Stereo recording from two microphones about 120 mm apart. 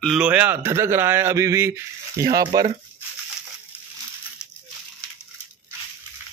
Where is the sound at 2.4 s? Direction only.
35° right (ahead or behind).